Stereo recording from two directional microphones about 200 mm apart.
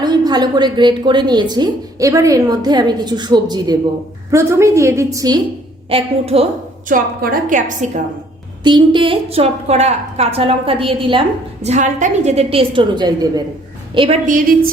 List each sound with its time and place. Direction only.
0.0 s a woman's voice: 20° right (ahead or behind)
5.9 s a woman's voice: 30° right (ahead or behind)
8.6 s a woman's voice: 25° right (ahead or behind)
14.3 s a woman's voice: 45° right (ahead or behind)